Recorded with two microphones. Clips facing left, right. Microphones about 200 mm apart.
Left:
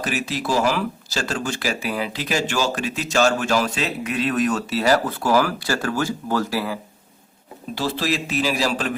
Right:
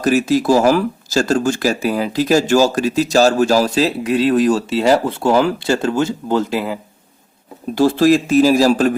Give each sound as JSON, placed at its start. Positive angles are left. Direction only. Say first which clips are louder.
{"t": 0.0, "sound": "speech", "louder": "right 11 dB", "side_deg": -40}
{"t": 7.8, "sound": "a man's voice", "louder": "right 12 dB", "side_deg": -50}